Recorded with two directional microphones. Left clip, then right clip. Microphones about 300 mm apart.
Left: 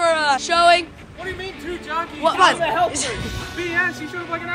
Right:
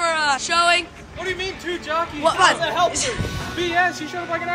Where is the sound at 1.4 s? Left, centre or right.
Centre.